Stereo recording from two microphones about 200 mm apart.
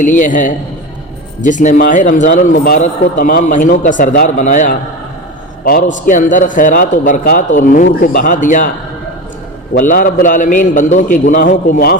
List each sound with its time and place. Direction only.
0.0 s a man's voice: 40° left (ahead or behind)
9.8 s a man's voice: 40° left (ahead or behind)